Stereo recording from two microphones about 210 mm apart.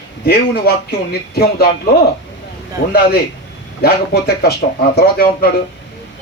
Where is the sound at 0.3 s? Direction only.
50° left (ahead or behind).